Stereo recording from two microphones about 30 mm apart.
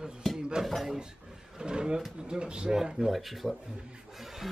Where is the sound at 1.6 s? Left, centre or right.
Right.